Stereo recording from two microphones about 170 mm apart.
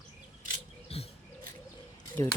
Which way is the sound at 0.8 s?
35° left (ahead or behind).